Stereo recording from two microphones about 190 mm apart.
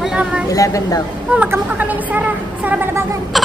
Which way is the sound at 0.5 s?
15° left (ahead or behind).